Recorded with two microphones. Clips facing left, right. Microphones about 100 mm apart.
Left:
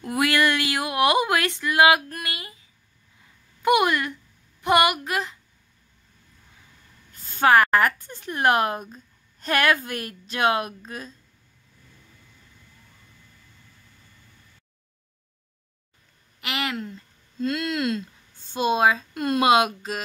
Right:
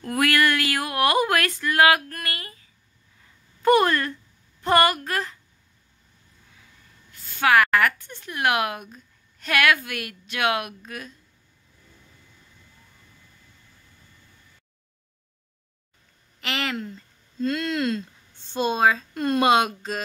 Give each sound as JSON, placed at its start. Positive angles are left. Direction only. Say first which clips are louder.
{"t": 0.0, "sound": "a sound", "louder": "even", "side_deg": 20}
{"t": 3.6, "sound": "a woman's voice", "louder": "right 2 dB", "side_deg": 15}
{"t": 7.1, "sound": "a woman's voice", "louder": "left 2 dB", "side_deg": 40}
{"t": 16.3, "sound": "a woman's voice", "louder": "even", "side_deg": 5}